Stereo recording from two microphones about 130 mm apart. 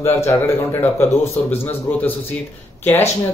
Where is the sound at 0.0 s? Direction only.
20° left (ahead or behind).